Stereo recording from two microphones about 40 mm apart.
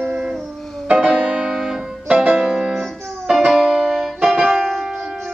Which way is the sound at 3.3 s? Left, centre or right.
Centre.